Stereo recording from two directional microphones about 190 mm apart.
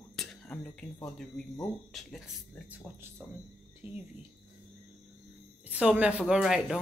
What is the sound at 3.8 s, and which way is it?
Speech, 30° left (ahead or behind).